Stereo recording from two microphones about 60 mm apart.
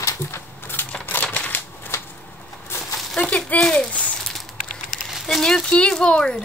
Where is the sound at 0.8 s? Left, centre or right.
Left.